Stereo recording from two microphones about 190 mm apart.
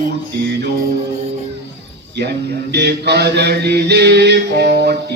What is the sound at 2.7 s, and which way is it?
Mantra, 60° right (ahead or behind).